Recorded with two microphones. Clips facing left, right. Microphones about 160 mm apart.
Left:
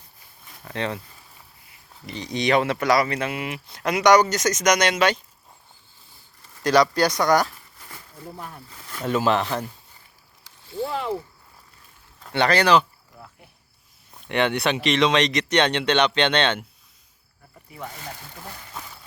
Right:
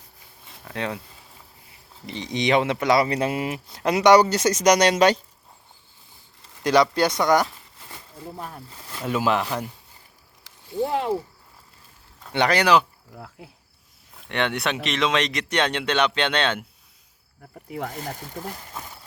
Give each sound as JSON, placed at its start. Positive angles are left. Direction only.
{"t": 0.5, "sound": "speech", "side_deg": 0}
{"t": 2.0, "sound": "speech", "side_deg": -20}
{"t": 3.1, "sound": "speech", "side_deg": -35}
{"t": 6.6, "sound": "speech", "side_deg": -20}
{"t": 9.0, "sound": "speech", "side_deg": -5}
{"t": 10.7, "sound": "speech", "side_deg": -15}
{"t": 12.3, "sound": "speech", "side_deg": -15}
{"t": 13.1, "sound": "speech", "side_deg": -80}
{"t": 14.3, "sound": "speech", "side_deg": 0}
{"t": 17.9, "sound": "speech", "side_deg": -40}